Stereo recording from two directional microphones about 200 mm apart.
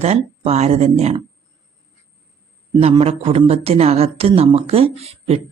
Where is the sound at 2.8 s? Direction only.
30° right (ahead or behind).